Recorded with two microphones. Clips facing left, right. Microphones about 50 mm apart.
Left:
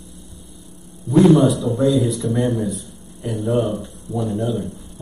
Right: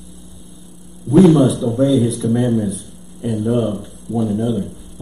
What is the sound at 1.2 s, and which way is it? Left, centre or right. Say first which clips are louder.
A man's voice: right 1 dB; centre.